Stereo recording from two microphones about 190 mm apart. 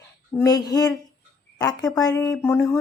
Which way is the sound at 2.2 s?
15° left (ahead or behind).